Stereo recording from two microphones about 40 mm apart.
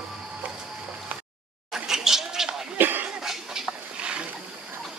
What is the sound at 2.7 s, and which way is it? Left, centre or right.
Cough, right.